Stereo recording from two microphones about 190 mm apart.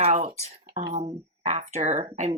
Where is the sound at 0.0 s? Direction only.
30° right (ahead or behind).